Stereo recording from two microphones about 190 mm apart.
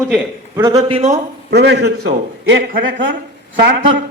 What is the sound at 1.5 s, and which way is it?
A man's voice, 60° right (ahead or behind).